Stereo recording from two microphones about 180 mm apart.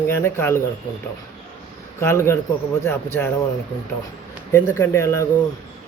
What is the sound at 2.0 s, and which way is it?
Speech, 15° left (ahead or behind).